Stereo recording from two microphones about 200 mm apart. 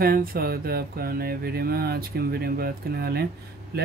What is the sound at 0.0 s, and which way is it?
Speech, 50° right (ahead or behind).